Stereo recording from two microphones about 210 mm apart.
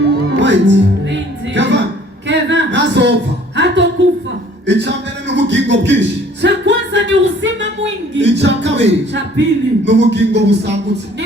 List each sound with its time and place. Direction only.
0.3 s music: 60° right (ahead or behind)
2.2 s a sound: 60° right (ahead or behind)
6.4 s singing: 55° right (ahead or behind)
8.1 s speech: 55° right (ahead or behind)